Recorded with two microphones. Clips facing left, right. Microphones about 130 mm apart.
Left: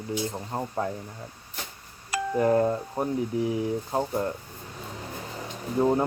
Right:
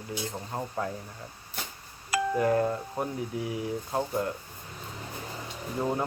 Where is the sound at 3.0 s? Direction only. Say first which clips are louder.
Left 3 dB; 5° right (ahead or behind).